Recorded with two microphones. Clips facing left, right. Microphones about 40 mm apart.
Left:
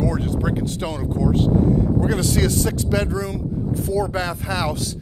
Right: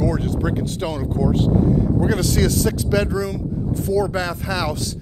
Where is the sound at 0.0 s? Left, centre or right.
Centre.